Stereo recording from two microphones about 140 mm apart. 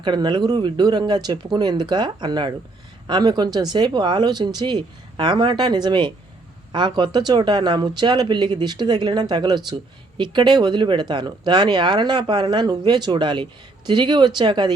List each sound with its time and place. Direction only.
0.0 s speech: 35° right (ahead or behind)